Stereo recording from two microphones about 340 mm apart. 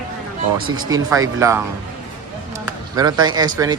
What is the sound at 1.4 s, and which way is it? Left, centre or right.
Speech, centre.